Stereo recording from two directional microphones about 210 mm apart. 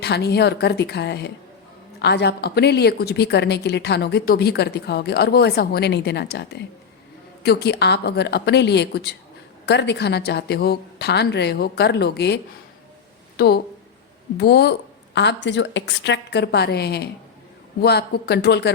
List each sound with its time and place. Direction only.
0.0 s a woman's voice: 55° left (ahead or behind)